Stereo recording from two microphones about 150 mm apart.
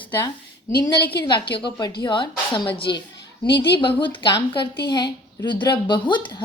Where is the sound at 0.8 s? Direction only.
30° left (ahead or behind).